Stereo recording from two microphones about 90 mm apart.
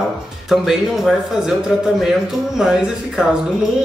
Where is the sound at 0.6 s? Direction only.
Centre (ahead or behind).